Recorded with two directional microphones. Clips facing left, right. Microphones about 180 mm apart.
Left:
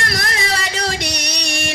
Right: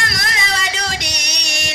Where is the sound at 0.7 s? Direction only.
55° left (ahead or behind).